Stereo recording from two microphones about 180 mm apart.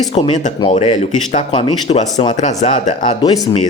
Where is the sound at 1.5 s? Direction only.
25° left (ahead or behind); by 3.0 s 45° left (ahead or behind).